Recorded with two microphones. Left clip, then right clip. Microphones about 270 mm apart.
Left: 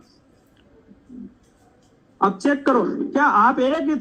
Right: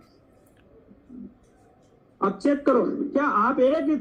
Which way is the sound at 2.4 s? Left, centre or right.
Left.